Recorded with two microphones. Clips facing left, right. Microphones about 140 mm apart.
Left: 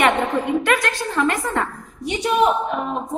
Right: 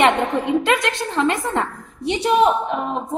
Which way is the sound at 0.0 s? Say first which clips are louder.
Right 1 dB; 25° right (ahead or behind).